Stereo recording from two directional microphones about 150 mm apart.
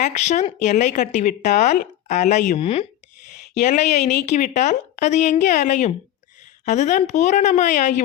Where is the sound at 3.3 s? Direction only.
55° left (ahead or behind).